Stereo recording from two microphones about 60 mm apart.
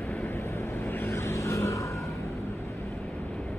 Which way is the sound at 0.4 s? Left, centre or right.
Left.